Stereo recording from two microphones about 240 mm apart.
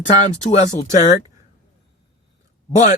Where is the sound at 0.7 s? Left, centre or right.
Left.